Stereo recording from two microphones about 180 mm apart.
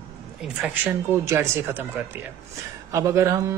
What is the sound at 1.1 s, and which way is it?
Speech, 15° right (ahead or behind).